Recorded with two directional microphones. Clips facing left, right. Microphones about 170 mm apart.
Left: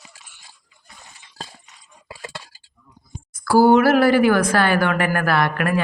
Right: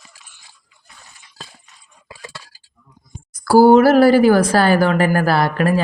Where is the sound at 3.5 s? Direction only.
35° right (ahead or behind).